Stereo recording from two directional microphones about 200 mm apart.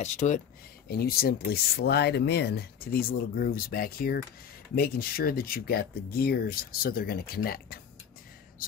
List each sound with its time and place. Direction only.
0.0 s speech: 35° left (ahead or behind)
0.8 s speech: 50° left (ahead or behind)